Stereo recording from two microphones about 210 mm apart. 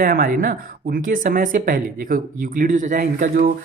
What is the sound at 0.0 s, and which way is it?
Speech, 45° right (ahead or behind).